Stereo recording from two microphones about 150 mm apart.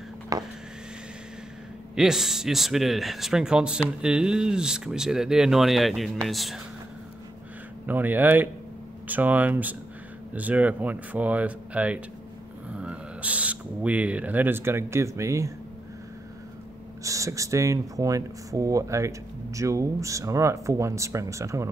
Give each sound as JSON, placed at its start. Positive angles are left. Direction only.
{"t": 0.3, "sound": "speech", "side_deg": -25}
{"t": 2.0, "sound": "speech", "side_deg": -5}
{"t": 7.8, "sound": "speech", "side_deg": -10}
{"t": 17.0, "sound": "speech", "side_deg": -20}